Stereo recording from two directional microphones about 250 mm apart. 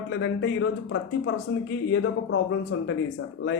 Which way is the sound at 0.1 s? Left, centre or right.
Left.